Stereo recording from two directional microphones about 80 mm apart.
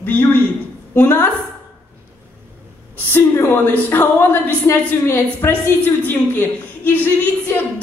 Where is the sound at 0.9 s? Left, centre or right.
Left.